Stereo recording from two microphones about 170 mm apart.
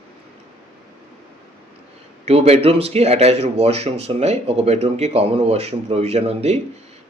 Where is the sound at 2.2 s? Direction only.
40° right (ahead or behind).